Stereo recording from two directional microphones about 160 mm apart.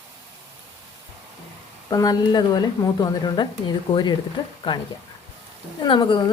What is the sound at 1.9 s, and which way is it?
A woman's voice, 25° left (ahead or behind).